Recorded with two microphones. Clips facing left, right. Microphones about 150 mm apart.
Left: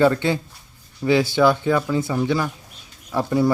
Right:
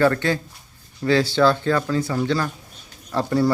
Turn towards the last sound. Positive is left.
turn(degrees=15)  # may be behind; listen again after turning